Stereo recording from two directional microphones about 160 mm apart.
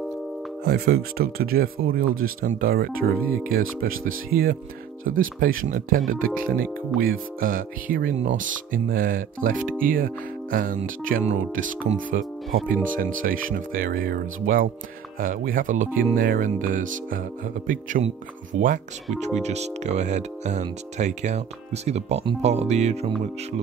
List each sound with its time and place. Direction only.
0.7 s speech: 75° right (ahead or behind)
5.0 s speech: 60° right (ahead or behind); by 23.1 s 45° right (ahead or behind)